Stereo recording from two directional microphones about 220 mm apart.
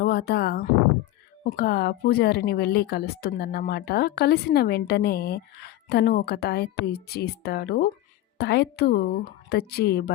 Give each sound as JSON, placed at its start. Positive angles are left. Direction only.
{"t": 0.0, "sound": "speech", "side_deg": 45}